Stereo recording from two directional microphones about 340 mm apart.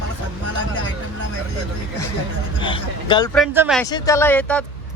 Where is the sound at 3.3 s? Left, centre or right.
Centre.